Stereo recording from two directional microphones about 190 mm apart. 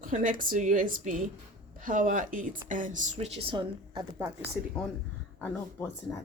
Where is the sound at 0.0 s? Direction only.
45° right (ahead or behind); by 4.3 s 25° right (ahead or behind).